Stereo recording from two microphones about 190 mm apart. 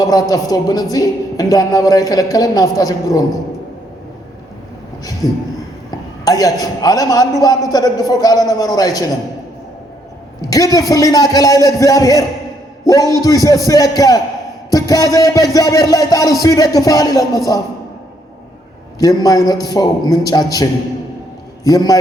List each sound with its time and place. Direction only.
0.0 s speech: 20° left (ahead or behind)
5.2 s speech: 20° left (ahead or behind)
10.5 s a man's voice: 20° left (ahead or behind)
18.9 s a man's voice: 20° left (ahead or behind)